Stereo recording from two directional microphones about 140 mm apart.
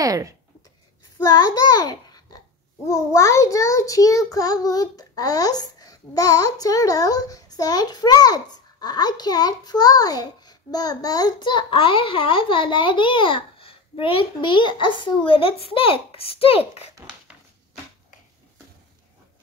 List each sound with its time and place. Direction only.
0.0 s speech: 25° right (ahead or behind)
1.1 s a child's voice: 25° left (ahead or behind)
2.9 s child singing: 20° left (ahead or behind); by 16.8 s 45° left (ahead or behind)